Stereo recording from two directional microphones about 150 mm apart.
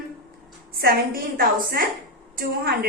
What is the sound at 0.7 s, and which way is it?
A man's voice, 80° right.